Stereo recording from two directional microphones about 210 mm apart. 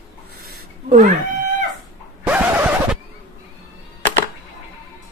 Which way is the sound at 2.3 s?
5° right (ahead or behind).